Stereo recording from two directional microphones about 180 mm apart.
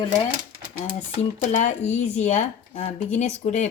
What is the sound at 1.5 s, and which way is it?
Speech, 40° left (ahead or behind).